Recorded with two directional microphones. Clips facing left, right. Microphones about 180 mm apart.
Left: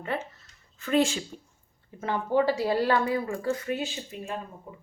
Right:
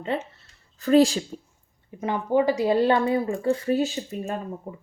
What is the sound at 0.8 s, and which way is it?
Speech, 35° right (ahead or behind).